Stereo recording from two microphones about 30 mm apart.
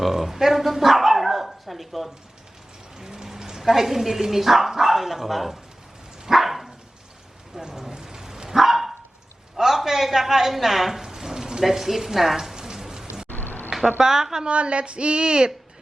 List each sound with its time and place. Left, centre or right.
0.0 s dog: centre
3.0 s rain: right
3.6 s speech: centre
6.3 s dog: centre
7.8 s dog: right
9.6 s a sound: centre
11.6 s speech: centre
12.5 s rain on surface: right
12.8 s rain: centre
13.2 s a sound: left
14.0 s speech: centre
14.4 s speech: right